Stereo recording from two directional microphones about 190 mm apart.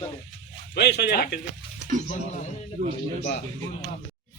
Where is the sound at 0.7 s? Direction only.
60° left (ahead or behind).